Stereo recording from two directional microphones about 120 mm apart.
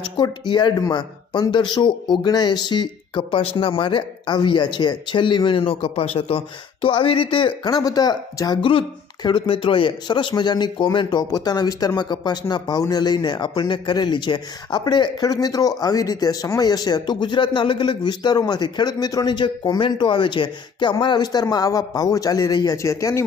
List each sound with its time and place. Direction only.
0.0 s speech: 40° left (ahead or behind)